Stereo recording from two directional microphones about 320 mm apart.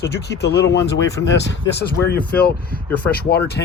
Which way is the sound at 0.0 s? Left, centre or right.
Left.